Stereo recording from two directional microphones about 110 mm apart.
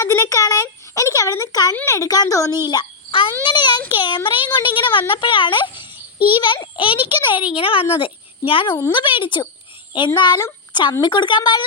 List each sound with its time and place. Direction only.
0.0 s a sound: 25° left (ahead or behind)
1.7 s a woman's voice: 25° left (ahead or behind)
2.6 s a child's voice: 45° left (ahead or behind)